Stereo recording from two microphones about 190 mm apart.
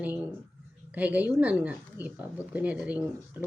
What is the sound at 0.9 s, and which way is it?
Speech, 10° right (ahead or behind).